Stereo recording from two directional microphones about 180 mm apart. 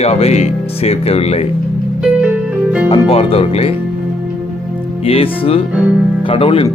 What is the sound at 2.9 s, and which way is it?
Speech, 30° left (ahead or behind).